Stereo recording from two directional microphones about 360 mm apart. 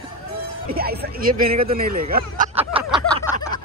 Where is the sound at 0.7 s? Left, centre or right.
Right.